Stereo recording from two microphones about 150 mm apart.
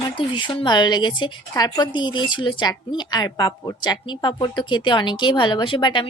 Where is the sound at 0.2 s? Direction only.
35° left (ahead or behind).